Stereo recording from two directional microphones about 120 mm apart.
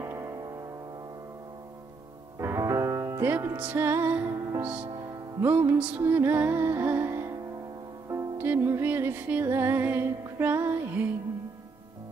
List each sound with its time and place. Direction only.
0.0 s music: 30° right (ahead or behind)
2.3 s music: 20° right (ahead or behind)
4.8 s music: 30° right (ahead or behind)
5.4 s music: 20° right (ahead or behind)